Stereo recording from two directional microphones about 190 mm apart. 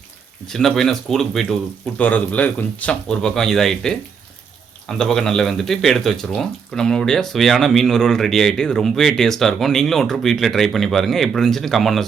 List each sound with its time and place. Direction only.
0.4 s speech: centre (ahead or behind)